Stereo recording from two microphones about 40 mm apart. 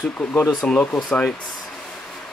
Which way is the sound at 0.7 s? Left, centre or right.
Centre.